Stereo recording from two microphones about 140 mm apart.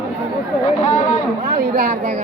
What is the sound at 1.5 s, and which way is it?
Speech, 90° right.